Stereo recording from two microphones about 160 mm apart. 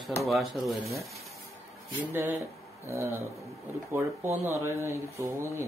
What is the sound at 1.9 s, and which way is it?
Speech, 15° right (ahead or behind).